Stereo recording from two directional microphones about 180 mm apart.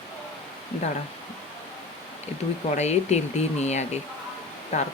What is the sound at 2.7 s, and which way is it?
Speech, 40° left (ahead or behind).